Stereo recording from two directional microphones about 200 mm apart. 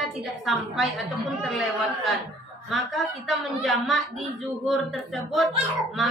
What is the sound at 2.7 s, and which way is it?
Speech, centre (ahead or behind).